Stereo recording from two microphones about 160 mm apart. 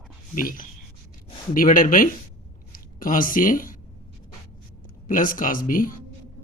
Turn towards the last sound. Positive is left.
turn(degrees=60)  # may be behind; listen again after turning